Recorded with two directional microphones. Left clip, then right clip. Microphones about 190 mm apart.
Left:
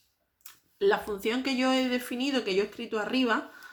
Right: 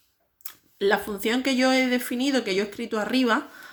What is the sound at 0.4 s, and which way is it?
Speech, 25° right (ahead or behind).